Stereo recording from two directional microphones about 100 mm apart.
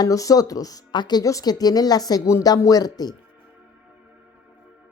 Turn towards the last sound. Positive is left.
turn(degrees=40)  # may be behind; listen again after turning